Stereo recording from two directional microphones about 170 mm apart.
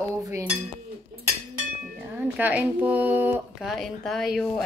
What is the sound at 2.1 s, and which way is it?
Speech, 10° right (ahead or behind).